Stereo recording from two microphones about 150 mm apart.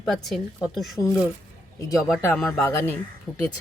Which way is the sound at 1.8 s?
25° left (ahead or behind).